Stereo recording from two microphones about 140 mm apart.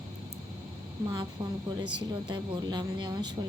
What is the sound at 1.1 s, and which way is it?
Speech, 35° right (ahead or behind).